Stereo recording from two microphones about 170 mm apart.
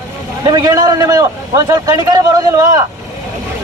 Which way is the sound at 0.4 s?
20° right (ahead or behind).